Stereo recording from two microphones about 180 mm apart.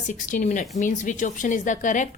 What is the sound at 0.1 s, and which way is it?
A woman's voice, 45° left (ahead or behind).